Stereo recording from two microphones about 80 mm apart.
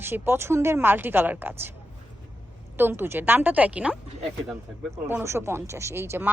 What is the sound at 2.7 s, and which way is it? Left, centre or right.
A woman's voice, right.